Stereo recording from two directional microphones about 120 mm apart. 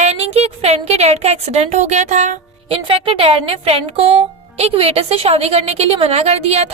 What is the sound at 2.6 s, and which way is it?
Speech, 50° right (ahead or behind).